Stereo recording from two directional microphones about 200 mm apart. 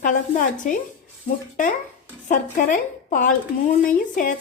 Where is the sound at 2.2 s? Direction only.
40° left (ahead or behind).